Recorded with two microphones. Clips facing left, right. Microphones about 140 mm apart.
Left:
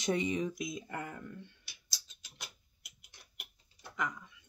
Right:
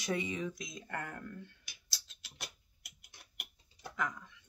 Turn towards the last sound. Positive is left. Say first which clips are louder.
# even
turn(degrees=0)  # may be behind; listen again after turning